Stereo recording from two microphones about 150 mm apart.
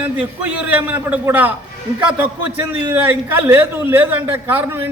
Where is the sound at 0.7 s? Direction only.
10° right (ahead or behind).